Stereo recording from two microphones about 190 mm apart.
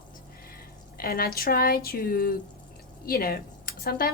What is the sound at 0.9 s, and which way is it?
A woman's voice, 50° left (ahead or behind).